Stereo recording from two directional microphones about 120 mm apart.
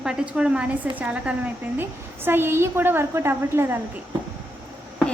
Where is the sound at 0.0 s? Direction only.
5° right (ahead or behind).